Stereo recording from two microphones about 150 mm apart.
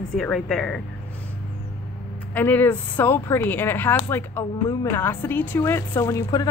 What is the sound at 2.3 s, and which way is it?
Speech, 15° left (ahead or behind).